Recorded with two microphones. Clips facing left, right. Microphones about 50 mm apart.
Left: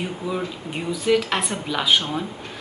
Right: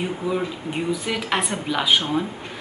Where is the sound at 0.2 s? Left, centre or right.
Centre.